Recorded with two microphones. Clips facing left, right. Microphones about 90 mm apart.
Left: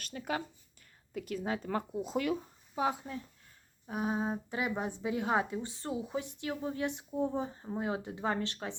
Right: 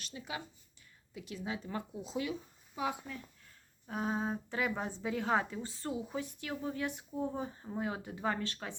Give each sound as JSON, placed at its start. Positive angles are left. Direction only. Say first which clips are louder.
{"t": 0.0, "sound": "a woman's voice", "louder": "left 6 dB", "side_deg": 50}
{"t": 2.7, "sound": "speech", "louder": "left 4 dB", "side_deg": 35}
{"t": 3.8, "sound": "a woman's voice", "louder": "left 2 dB", "side_deg": 15}